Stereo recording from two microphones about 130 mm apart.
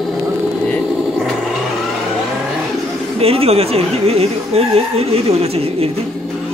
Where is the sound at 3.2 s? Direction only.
50° right (ahead or behind).